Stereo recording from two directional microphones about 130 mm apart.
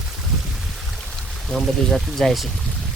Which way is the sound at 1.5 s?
Centre (ahead or behind).